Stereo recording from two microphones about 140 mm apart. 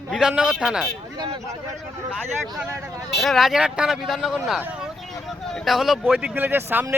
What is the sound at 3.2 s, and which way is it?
Speech, centre (ahead or behind).